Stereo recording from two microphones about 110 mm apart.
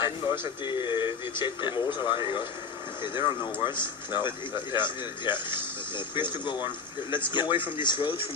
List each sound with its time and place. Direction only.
0.0 s speech: 45° left (ahead or behind)